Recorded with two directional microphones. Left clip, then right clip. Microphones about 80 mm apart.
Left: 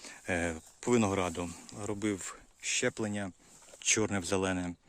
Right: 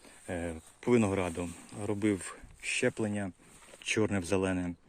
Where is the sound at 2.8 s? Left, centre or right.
Left.